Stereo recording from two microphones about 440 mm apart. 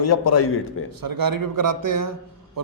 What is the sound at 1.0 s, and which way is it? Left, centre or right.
Speech, right.